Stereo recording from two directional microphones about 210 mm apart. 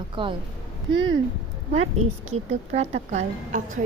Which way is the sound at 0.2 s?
25° right (ahead or behind).